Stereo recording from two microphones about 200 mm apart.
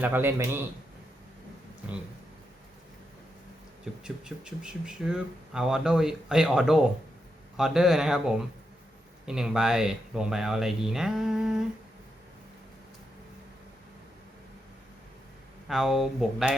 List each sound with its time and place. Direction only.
0.0 s a man's voice: 10° right (ahead or behind)
4.0 s speech: 5° right (ahead or behind)
15.6 s speech: centre (ahead or behind)